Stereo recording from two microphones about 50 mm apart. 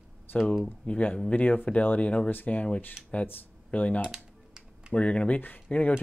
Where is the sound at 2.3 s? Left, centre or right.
Left.